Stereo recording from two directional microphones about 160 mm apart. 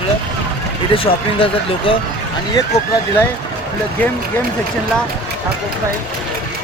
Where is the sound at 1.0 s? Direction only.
35° left (ahead or behind).